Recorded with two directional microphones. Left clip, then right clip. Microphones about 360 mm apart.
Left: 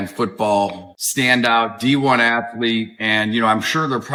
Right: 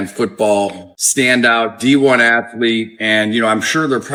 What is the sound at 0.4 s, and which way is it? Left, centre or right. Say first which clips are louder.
Speech: right 3 dB; centre.